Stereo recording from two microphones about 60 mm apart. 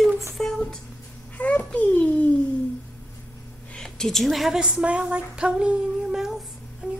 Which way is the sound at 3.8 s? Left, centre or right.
Centre.